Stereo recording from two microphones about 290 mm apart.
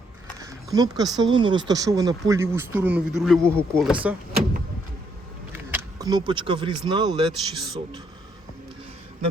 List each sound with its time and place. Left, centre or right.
0.3 s speech: centre
5.7 s speech: centre